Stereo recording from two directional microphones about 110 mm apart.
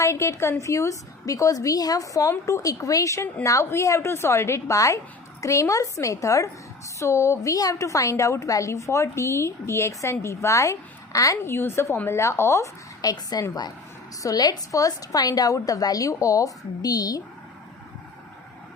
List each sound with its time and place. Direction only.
0.0 s a woman's voice: 25° left (ahead or behind)